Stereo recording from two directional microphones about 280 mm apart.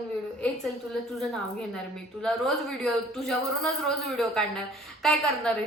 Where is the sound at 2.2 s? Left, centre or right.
Centre.